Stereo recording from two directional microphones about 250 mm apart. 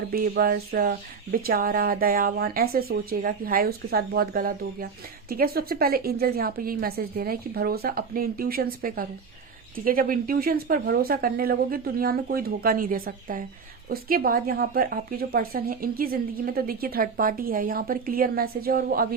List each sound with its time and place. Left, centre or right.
0.1 s a woman's voice: right